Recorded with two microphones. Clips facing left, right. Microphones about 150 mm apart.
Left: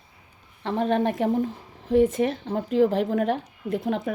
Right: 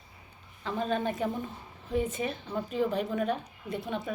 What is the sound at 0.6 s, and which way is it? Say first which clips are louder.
Speech: left 7 dB; 70° left (ahead or behind).